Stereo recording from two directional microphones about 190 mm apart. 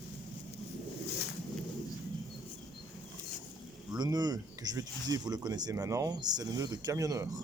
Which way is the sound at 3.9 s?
20° right (ahead or behind).